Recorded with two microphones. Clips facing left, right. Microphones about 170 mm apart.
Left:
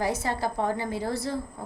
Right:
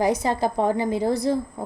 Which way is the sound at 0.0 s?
15° right (ahead or behind).